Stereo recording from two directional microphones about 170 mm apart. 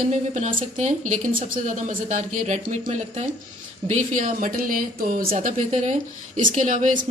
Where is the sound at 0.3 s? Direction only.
45° right (ahead or behind).